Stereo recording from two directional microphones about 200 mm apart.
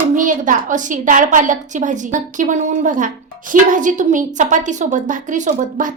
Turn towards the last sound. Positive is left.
turn(degrees=-40)  # may be behind; listen again after turning